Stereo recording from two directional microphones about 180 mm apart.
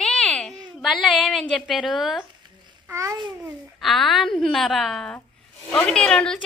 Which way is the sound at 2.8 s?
15° right (ahead or behind).